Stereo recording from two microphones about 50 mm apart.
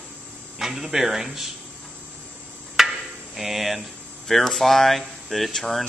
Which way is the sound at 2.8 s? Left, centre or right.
Centre.